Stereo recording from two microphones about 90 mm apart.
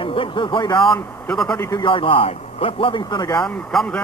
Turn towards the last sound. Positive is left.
turn(degrees=5)  # may be behind; listen again after turning